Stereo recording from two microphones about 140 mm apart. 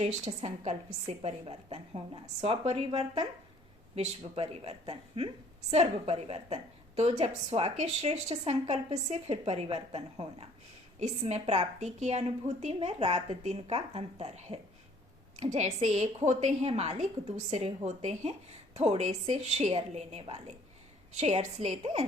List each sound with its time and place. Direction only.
0.0 s a woman's voice: 50° right (ahead or behind)